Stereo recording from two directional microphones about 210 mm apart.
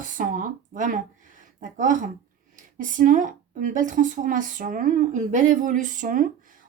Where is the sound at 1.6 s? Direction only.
40° right (ahead or behind).